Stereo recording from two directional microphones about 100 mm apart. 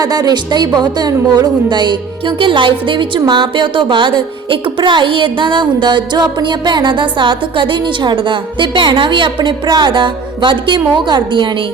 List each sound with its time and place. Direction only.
0.0 s a woman's voice: 40° right (ahead or behind)